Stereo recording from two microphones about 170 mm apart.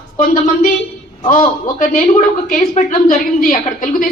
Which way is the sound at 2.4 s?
45° left (ahead or behind).